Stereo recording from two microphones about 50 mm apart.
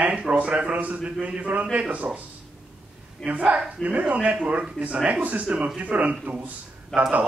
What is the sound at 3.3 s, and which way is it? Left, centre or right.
Speech, right.